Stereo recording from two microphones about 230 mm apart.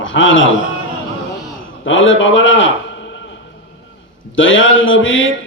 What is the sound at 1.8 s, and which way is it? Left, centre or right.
Speech, left.